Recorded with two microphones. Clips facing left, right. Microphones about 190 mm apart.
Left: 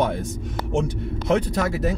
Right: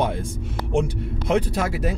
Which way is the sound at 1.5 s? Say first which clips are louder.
Left 1 dB; 10° right (ahead or behind).